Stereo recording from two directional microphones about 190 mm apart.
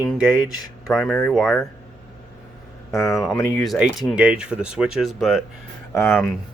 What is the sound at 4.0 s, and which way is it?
Speech, 5° right (ahead or behind).